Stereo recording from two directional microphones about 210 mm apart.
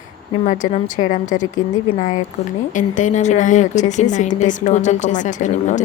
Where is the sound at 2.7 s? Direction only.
35° left (ahead or behind).